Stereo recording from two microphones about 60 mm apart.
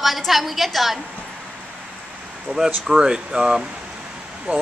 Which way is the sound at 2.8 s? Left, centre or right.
Centre.